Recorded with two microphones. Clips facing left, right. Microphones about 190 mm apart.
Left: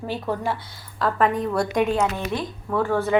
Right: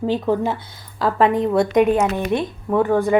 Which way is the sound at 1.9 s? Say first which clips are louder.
Right 5 dB; 15° right (ahead or behind).